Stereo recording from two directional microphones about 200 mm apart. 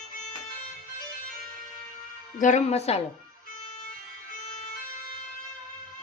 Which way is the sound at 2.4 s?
35° left (ahead or behind).